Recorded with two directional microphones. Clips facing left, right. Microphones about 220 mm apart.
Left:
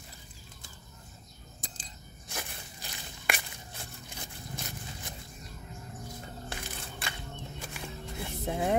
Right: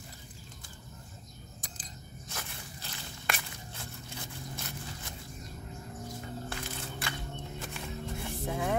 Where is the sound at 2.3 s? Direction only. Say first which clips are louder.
Left 3 dB; 15° left (ahead or behind).